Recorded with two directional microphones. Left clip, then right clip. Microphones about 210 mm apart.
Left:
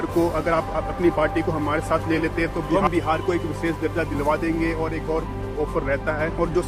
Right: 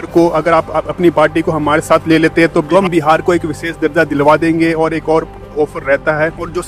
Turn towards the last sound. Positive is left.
turn(degrees=-50)  # may be behind; listen again after turning